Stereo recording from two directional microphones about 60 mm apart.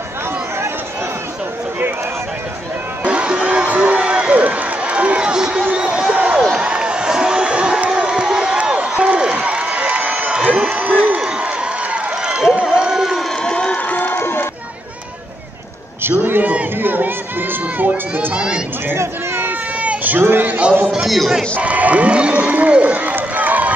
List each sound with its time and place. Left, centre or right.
3.0 s run: centre
6.4 s crowd: centre
11.9 s a sound: centre
12.6 s crowd: centre
13.4 s crowd: centre
13.8 s crowd: left
16.0 s a sound: right
16.8 s run: right
18.3 s chatter: centre
19.4 s a sound: right
20.9 s music: centre
21.5 s sheep: right